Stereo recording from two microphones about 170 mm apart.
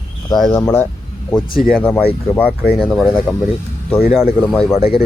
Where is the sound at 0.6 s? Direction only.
20° left (ahead or behind).